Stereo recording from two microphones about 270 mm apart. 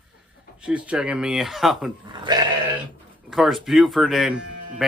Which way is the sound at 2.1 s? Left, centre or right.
Centre.